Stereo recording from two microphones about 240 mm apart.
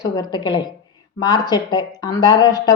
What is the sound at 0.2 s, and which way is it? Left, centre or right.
Speech, centre.